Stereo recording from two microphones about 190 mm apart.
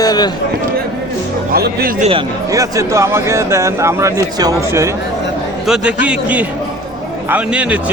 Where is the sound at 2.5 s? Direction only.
15° right (ahead or behind).